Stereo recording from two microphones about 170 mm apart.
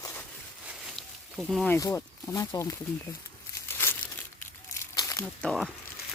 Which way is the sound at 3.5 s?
15° left (ahead or behind).